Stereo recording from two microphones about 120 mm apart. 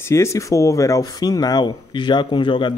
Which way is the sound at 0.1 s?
25° left (ahead or behind).